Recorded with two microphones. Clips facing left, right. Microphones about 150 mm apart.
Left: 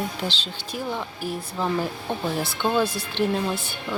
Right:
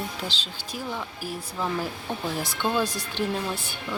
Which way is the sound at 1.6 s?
25° left (ahead or behind).